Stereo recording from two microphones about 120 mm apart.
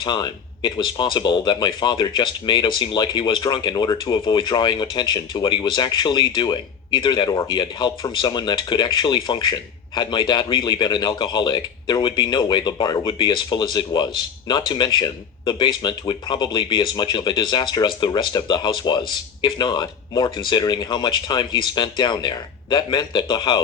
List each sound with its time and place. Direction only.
0.0 s speech: 35° left (ahead or behind)